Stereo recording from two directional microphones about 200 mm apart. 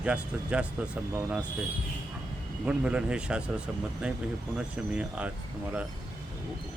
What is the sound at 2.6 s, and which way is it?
Speech, 5° right (ahead or behind).